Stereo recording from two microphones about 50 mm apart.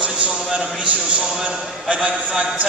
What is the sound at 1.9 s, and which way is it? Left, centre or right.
Speech, right.